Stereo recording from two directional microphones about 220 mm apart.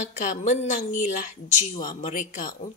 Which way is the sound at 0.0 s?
30° left (ahead or behind).